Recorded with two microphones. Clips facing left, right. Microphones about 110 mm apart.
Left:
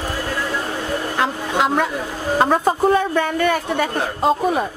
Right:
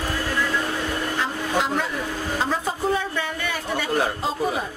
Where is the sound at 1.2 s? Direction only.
65° left (ahead or behind).